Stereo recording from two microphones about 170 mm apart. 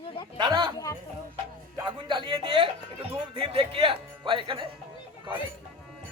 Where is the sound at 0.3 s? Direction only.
25° right (ahead or behind).